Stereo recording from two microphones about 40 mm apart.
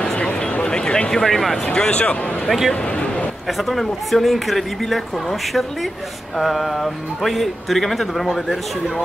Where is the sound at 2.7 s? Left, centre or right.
Left.